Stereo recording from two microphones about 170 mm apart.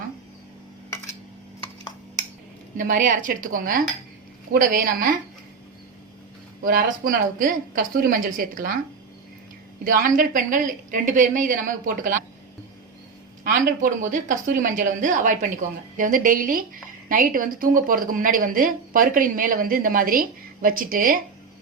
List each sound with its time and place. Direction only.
2.7 s a woman's voice: 50° right (ahead or behind)
6.6 s a woman's voice: 55° right (ahead or behind)
9.8 s a woman's voice: 55° right (ahead or behind)
13.4 s a woman's voice: 50° right (ahead or behind)